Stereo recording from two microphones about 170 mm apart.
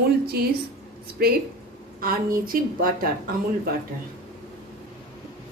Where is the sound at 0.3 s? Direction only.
65° right (ahead or behind).